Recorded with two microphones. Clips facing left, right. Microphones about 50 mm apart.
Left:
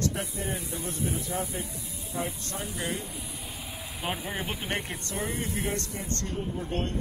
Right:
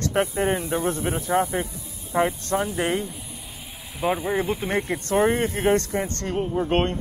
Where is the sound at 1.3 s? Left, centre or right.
Right.